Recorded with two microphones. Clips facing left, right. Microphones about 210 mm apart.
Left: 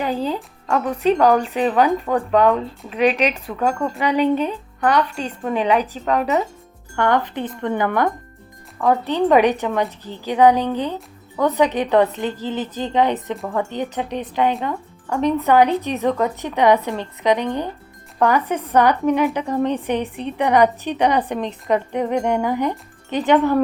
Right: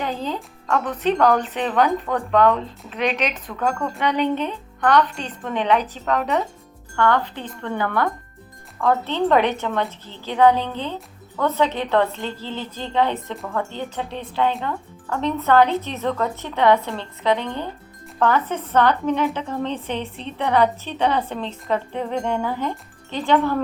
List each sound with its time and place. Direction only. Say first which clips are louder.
0.0 s speech: left 4 dB; 10° left (ahead or behind)